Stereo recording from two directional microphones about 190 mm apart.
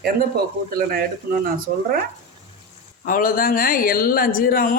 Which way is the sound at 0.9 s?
50° right (ahead or behind).